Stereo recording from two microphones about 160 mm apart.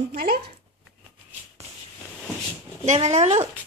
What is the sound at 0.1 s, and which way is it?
Speech, 70° right (ahead or behind).